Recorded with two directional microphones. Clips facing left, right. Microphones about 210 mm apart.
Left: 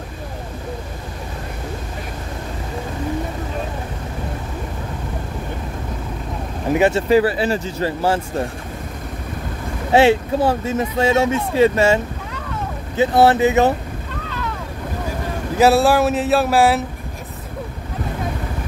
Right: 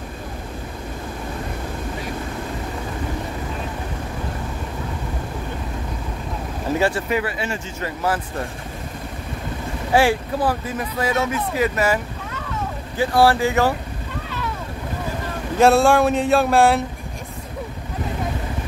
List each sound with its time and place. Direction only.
6.7 s speech: 20° left (ahead or behind)
9.9 s speech: 25° left (ahead or behind)
15.5 s speech: 5° left (ahead or behind)